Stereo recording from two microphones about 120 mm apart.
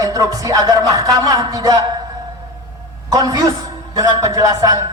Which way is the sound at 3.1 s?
30° right (ahead or behind).